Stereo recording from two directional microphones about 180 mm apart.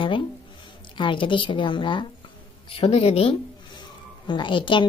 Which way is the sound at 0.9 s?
30° left (ahead or behind).